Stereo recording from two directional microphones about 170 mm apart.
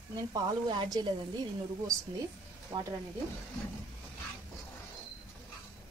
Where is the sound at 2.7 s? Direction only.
20° right (ahead or behind).